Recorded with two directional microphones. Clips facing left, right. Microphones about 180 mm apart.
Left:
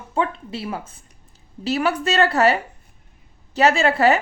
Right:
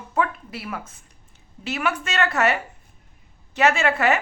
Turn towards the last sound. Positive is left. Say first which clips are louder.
# left 3 dB
turn(degrees=35)  # may be behind; listen again after turning